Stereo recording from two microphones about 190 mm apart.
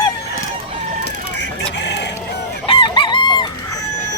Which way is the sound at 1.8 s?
65° left (ahead or behind).